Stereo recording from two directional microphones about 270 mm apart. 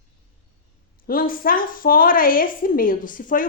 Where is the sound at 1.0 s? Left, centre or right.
Left.